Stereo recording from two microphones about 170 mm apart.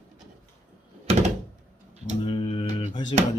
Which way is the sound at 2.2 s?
35° left (ahead or behind).